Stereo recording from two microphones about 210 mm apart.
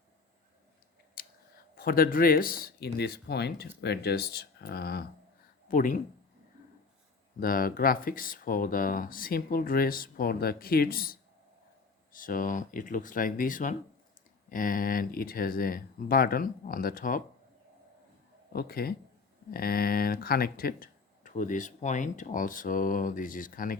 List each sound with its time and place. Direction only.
1.2 s a sound: 45° left (ahead or behind)
1.7 s speech: 45° left (ahead or behind)
7.3 s speech: 45° left (ahead or behind)
18.5 s speech: 45° left (ahead or behind)